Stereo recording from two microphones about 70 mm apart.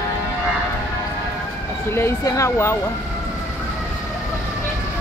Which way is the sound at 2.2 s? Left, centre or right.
Left.